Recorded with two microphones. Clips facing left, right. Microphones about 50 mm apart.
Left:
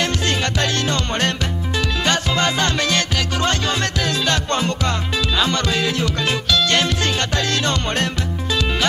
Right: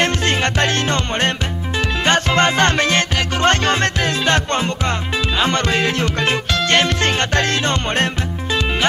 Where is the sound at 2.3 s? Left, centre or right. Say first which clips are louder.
Right 4 dB; right.